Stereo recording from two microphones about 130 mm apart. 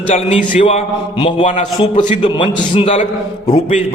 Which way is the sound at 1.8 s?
40° left (ahead or behind).